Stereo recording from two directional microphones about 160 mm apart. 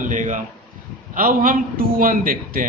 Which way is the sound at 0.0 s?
55° right (ahead or behind).